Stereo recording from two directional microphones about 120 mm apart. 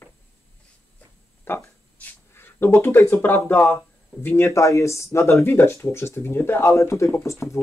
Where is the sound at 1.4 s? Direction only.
15° left (ahead or behind).